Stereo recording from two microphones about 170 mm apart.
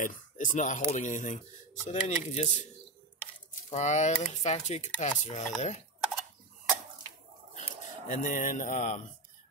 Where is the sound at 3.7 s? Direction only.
45° left (ahead or behind).